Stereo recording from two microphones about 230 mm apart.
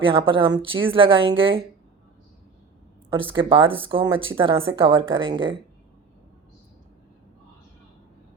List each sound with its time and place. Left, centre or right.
0.0 s a woman's voice: right
3.2 s a woman's voice: right